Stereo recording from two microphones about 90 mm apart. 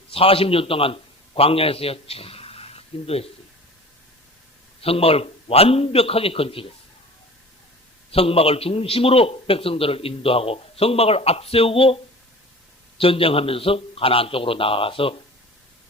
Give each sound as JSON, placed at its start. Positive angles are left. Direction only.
{"t": 0.1, "sound": "a man's voice", "side_deg": 90}
{"t": 4.8, "sound": "a man's voice", "side_deg": 90}
{"t": 8.1, "sound": "a man's voice", "side_deg": 90}
{"t": 13.0, "sound": "a man's voice", "side_deg": 90}